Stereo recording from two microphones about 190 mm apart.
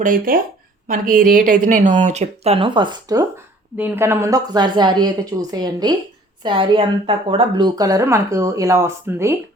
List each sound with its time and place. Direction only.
0.0 s speech: 50° right (ahead or behind); by 9.3 s 15° right (ahead or behind)